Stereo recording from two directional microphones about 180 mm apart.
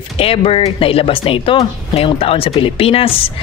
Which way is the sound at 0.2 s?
30° left (ahead or behind).